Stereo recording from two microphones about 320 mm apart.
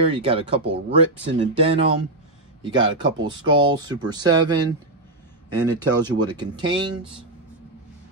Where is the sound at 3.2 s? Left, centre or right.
Centre.